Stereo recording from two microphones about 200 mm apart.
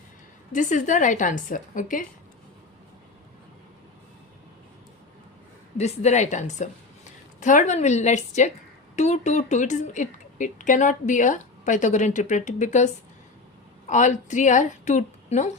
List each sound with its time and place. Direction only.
0.5 s speech: 40° left (ahead or behind)
5.7 s a woman's voice: 35° left (ahead or behind)